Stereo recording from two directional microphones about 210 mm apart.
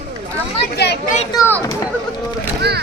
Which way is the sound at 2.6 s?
50° right (ahead or behind).